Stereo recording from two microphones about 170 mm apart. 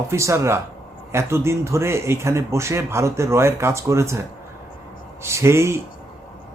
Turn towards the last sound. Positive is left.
turn(degrees=-15)  # may be behind; listen again after turning